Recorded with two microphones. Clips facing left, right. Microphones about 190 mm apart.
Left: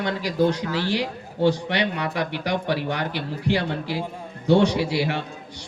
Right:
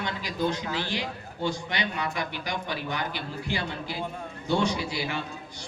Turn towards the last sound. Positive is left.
turn(degrees=65)  # may be behind; listen again after turning